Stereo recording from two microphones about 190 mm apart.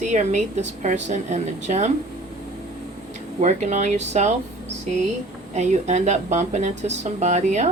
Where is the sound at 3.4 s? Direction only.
40° right (ahead or behind).